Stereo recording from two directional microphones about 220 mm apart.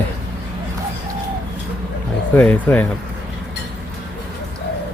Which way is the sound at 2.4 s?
5° left (ahead or behind).